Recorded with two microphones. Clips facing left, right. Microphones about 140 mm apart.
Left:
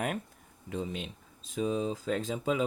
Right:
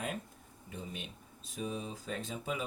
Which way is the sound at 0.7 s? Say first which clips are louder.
Left 8 dB; 90° left.